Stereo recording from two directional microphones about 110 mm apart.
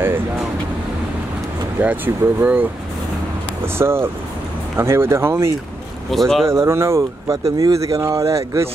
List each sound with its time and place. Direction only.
1.8 s speech: 15° right (ahead or behind)
6.0 s speech: centre (ahead or behind)
6.4 s speech: 25° right (ahead or behind)